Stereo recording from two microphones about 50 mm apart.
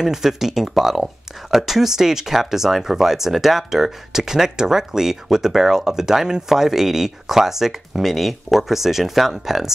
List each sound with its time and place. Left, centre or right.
0.0 s speech: centre